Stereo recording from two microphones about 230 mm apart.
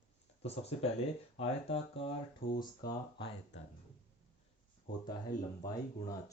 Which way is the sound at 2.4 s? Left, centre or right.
Left.